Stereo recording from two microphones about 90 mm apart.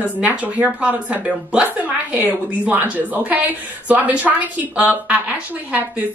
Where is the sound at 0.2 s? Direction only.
15° right (ahead or behind).